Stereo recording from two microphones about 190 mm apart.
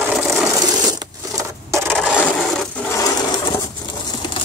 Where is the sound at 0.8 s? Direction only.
20° right (ahead or behind).